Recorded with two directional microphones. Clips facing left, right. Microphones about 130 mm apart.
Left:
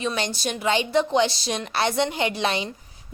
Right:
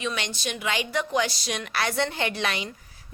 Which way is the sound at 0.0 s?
35° left (ahead or behind).